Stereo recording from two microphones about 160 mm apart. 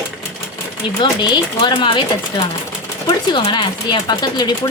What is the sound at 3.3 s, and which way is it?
Speech, 30° left (ahead or behind).